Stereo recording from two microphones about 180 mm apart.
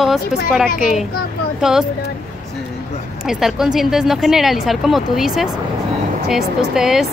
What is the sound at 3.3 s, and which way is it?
Speech, centre (ahead or behind).